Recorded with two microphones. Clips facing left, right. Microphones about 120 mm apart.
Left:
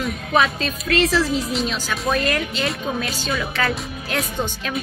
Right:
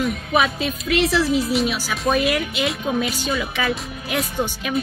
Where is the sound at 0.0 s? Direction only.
10° right (ahead or behind).